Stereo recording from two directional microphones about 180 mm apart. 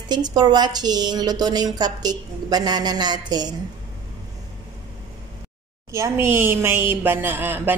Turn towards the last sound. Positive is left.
turn(degrees=-10)  # may be behind; listen again after turning